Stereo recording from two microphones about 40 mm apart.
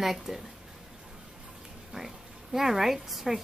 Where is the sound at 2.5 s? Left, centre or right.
Centre.